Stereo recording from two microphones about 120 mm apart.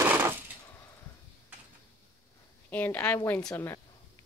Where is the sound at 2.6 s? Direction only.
15° left (ahead or behind).